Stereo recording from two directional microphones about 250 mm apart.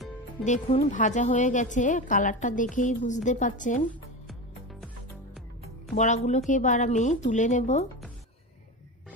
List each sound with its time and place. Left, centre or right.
0.5 s a woman's voice: left
5.9 s a woman's voice: left